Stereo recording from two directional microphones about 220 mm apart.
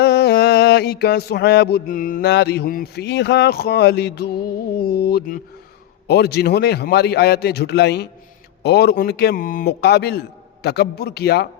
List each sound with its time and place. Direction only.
0.0 s mantra: 50° left (ahead or behind)
4.8 s a man's voice: 45° left (ahead or behind)